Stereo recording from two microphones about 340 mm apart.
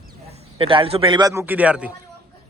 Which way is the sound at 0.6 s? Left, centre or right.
Centre.